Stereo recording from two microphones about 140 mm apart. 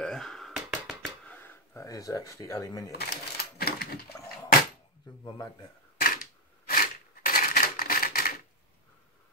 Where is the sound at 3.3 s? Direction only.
90° left.